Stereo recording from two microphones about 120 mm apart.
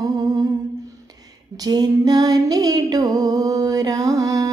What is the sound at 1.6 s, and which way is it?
Music, 35° right (ahead or behind).